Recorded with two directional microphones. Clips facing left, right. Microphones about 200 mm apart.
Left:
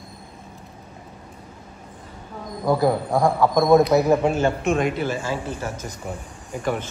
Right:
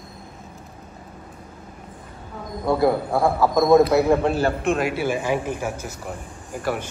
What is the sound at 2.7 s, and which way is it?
A man's voice, centre (ahead or behind).